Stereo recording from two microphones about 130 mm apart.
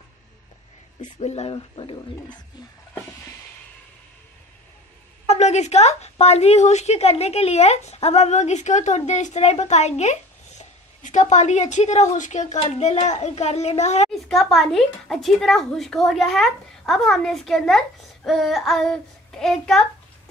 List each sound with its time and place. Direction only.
1.1 s a woman's voice: 55° left (ahead or behind)
1.5 s speech: 40° left (ahead or behind)
5.3 s a woman's voice: 60° left (ahead or behind)
12.6 s a woman's voice: 50° left (ahead or behind)
14.1 s speech: 5° left (ahead or behind)